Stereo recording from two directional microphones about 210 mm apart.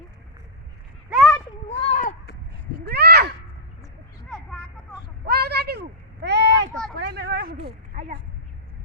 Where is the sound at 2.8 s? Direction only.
50° right (ahead or behind).